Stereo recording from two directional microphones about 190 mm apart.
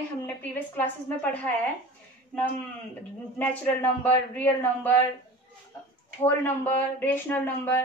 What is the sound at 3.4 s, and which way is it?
A man's voice, 10° left (ahead or behind).